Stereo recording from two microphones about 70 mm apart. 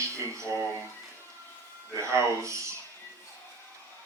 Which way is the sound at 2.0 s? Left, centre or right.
Right.